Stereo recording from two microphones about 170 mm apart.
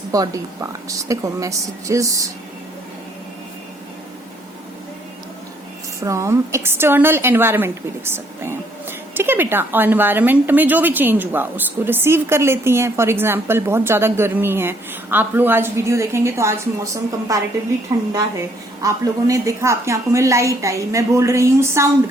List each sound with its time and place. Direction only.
0.1 s a woman's voice: 20° right (ahead or behind)
6.0 s a woman's voice: 15° right (ahead or behind)
18.8 s a woman's voice: 20° right (ahead or behind)